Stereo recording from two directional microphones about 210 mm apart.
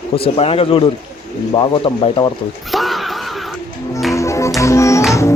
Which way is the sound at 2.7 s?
Centre (ahead or behind).